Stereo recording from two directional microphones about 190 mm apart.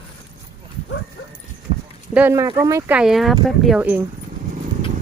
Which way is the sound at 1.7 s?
30° right (ahead or behind).